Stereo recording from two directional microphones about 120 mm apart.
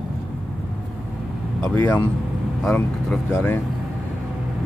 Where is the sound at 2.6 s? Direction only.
5° left (ahead or behind).